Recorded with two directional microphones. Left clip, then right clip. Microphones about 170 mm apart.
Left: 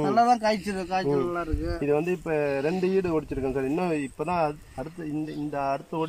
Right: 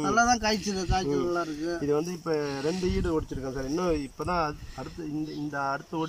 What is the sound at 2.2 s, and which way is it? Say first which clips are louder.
Speech: left 3 dB; 30° left (ahead or behind).